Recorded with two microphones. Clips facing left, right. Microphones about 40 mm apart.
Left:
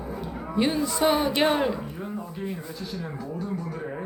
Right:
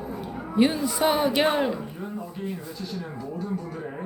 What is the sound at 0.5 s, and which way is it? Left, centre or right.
A man's voice, centre.